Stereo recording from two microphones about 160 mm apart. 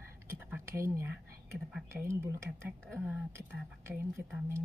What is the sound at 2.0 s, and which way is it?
Speech, 15° right (ahead or behind).